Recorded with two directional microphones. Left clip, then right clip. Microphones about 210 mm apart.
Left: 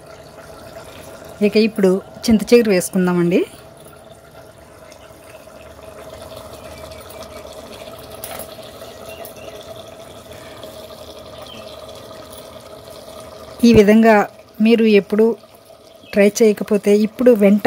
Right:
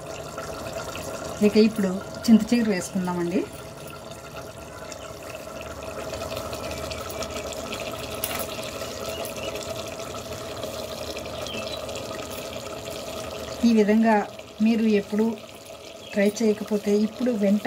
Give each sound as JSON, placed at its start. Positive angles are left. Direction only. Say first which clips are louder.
{"t": 1.4, "sound": "speech", "louder": "left 6 dB", "side_deg": 50}
{"t": 13.7, "sound": "speech", "louder": "left 10 dB", "side_deg": 50}